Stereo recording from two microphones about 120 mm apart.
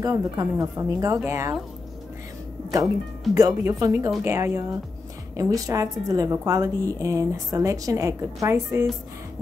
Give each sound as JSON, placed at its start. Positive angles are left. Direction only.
{"t": 0.0, "sound": "a woman's voice", "side_deg": -30}
{"t": 3.3, "sound": "a woman's voice", "side_deg": -25}